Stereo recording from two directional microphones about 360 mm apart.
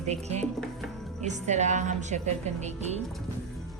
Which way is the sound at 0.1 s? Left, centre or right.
Centre.